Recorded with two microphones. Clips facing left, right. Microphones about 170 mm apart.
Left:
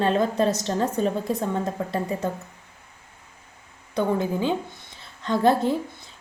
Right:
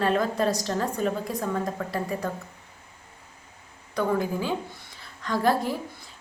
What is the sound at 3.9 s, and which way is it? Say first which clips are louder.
A woman's voice: left 2 dB; 25° left (ahead or behind).